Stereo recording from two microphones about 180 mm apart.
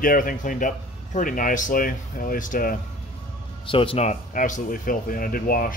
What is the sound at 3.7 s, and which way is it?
Speech, 30° left (ahead or behind).